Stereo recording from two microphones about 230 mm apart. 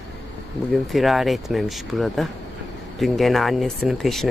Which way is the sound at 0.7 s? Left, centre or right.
Centre.